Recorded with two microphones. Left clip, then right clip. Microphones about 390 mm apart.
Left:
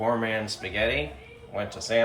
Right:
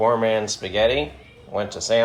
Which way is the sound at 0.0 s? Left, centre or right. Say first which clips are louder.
Right 7 dB; centre.